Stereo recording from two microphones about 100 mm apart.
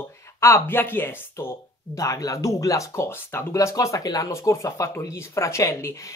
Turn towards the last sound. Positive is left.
turn(degrees=30)  # may be behind; listen again after turning